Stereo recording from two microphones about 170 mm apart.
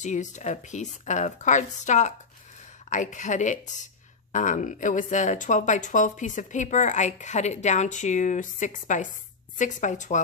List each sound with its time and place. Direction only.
0.0 s a woman's voice: 45° left (ahead or behind)